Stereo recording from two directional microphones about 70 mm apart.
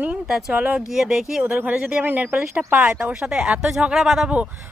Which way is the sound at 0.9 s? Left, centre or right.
Centre.